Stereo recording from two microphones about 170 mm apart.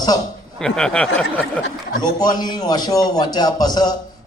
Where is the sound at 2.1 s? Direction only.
25° left (ahead or behind).